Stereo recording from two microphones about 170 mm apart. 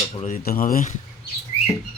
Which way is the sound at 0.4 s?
60° left (ahead or behind).